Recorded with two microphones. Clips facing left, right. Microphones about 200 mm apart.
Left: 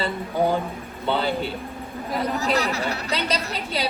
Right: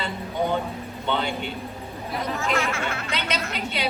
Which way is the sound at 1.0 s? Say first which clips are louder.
Left 3 dB; 35° left (ahead or behind).